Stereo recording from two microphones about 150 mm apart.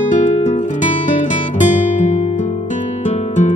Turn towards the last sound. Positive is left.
turn(degrees=50)  # may be behind; listen again after turning